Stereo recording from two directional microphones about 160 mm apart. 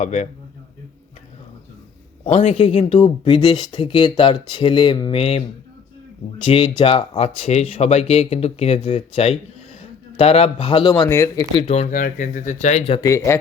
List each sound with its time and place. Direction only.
0.0 s speech: 45° left (ahead or behind)
2.2 s speech: 45° left (ahead or behind)
6.4 s speech: 35° left (ahead or behind)
11.1 s speech: 15° left (ahead or behind)
11.7 s speech: 40° left (ahead or behind)
11.9 s speech: 55° left (ahead or behind); by 13.0 s 40° left (ahead or behind)
13.0 s speech: 20° left (ahead or behind)